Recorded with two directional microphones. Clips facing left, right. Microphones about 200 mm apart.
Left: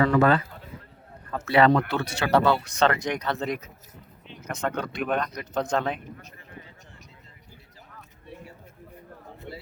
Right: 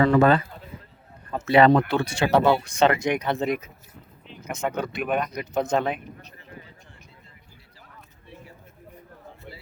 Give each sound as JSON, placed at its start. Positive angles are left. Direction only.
{"t": 0.0, "sound": "speech", "side_deg": -20}
{"t": 1.5, "sound": "speech", "side_deg": -20}